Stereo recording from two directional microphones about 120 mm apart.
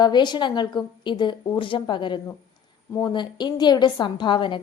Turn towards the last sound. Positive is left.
turn(degrees=40)  # may be behind; listen again after turning